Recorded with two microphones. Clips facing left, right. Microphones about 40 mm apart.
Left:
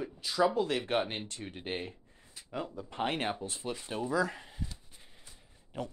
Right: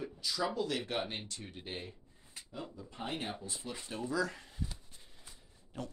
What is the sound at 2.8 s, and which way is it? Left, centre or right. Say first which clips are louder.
Speech: left 7 dB; left.